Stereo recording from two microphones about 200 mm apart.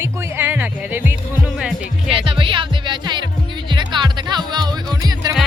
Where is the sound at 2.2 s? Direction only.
25° right (ahead or behind).